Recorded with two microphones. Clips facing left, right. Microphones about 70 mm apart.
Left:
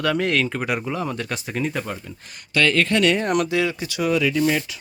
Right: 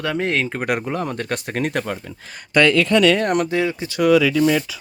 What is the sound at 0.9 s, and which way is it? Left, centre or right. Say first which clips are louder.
Speech: right 2 dB; right.